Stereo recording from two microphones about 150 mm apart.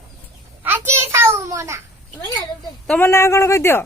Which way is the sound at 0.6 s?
15° right (ahead or behind).